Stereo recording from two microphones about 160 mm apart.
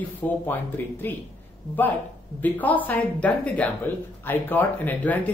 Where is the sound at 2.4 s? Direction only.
10° left (ahead or behind).